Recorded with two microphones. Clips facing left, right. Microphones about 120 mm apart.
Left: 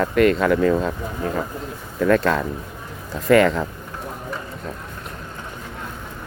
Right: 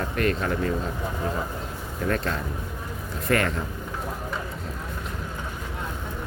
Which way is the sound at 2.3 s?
90° left.